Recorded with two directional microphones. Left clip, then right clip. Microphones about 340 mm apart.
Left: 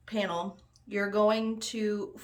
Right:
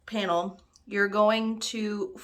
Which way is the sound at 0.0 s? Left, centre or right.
Centre.